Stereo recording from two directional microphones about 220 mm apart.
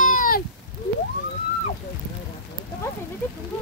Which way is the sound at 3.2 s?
10° left (ahead or behind).